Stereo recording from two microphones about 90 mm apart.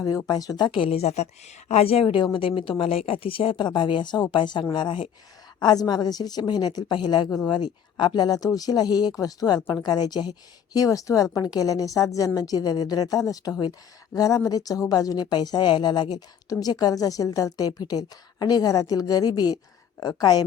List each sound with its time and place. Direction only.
0.3 s speech: 45° left (ahead or behind); by 0.9 s 70° left (ahead or behind)
1.8 s a woman's voice: 90° left; by 2.5 s 70° left (ahead or behind)
2.6 s a woman's voice: 80° left; by 5.0 s 60° left (ahead or behind)
5.5 s speech: 50° left (ahead or behind)